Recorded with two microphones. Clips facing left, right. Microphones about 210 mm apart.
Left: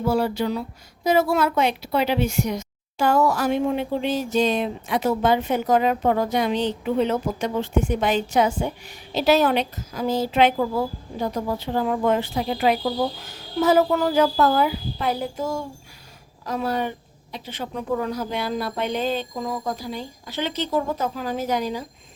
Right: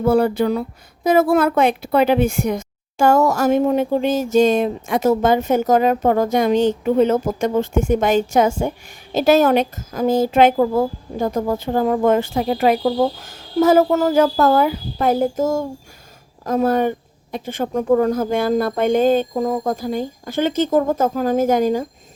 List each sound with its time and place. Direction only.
0.0 s speech: 55° right (ahead or behind)